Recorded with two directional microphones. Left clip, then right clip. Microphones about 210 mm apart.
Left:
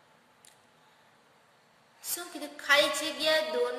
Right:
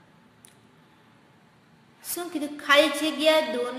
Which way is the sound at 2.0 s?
Centre (ahead or behind).